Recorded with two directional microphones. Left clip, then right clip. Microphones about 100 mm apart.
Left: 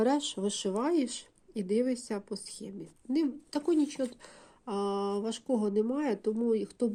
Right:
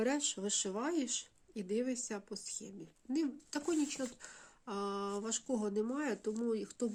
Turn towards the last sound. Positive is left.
turn(degrees=25)  # may be behind; listen again after turning